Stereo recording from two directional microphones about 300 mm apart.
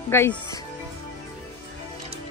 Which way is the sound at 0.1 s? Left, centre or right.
Centre.